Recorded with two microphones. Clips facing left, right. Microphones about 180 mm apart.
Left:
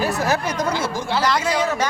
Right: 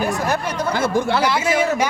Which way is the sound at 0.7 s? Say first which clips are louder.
Right 4 dB; 55° right (ahead or behind).